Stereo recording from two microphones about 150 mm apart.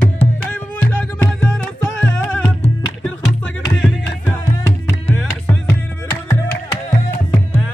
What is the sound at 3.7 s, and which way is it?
Music, 5° left (ahead or behind).